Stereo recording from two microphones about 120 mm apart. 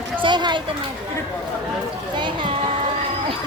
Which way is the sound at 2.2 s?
40° right (ahead or behind).